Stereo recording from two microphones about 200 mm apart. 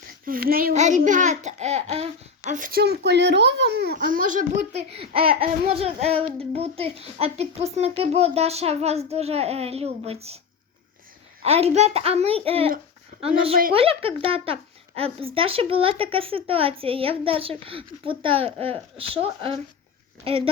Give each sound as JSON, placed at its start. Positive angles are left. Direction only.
{"t": 0.3, "sound": "a child's voice", "side_deg": -45}
{"t": 3.9, "sound": "a child's voice", "side_deg": -45}
{"t": 11.4, "sound": "a child's voice", "side_deg": -30}
{"t": 13.7, "sound": "a child's voice", "side_deg": -30}